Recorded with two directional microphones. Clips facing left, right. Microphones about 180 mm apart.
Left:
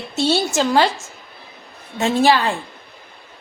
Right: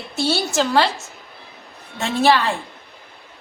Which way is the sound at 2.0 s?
15° left (ahead or behind).